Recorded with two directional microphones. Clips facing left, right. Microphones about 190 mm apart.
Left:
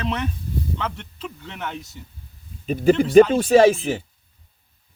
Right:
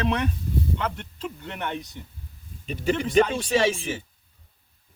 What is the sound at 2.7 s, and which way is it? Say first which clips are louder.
Speech: left 8 dB; 40° left (ahead or behind).